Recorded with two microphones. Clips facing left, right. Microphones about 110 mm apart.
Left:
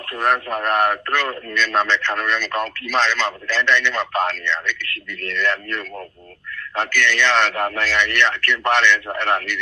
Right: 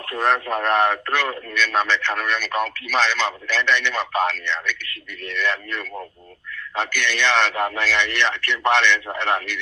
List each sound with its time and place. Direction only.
0.1 s a man's voice: 25° right (ahead or behind)